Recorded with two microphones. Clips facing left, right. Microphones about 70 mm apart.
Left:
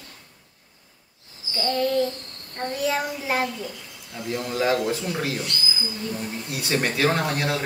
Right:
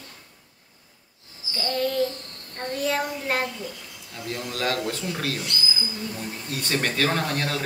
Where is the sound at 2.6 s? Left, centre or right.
Centre.